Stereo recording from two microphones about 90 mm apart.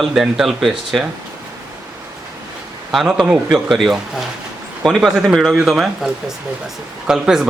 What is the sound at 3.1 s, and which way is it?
Speech, 15° right (ahead or behind).